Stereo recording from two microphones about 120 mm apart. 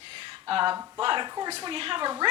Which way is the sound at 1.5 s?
50° right (ahead or behind).